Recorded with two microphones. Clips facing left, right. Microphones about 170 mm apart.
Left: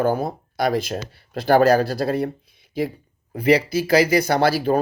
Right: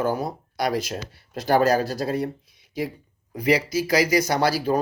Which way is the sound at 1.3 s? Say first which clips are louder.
Left 4 dB; 65° left (ahead or behind).